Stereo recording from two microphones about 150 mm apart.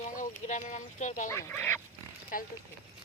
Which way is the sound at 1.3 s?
15° left (ahead or behind).